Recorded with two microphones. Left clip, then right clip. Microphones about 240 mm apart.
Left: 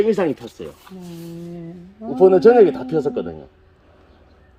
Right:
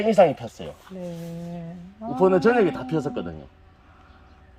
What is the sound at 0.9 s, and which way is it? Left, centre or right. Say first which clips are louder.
Speech: right 1 dB; left.